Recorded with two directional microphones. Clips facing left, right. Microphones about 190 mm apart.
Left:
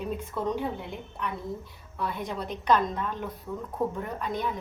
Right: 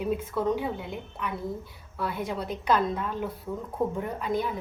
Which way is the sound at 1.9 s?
5° right (ahead or behind).